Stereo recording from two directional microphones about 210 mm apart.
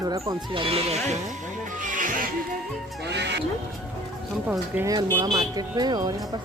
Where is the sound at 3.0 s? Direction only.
55° right (ahead or behind).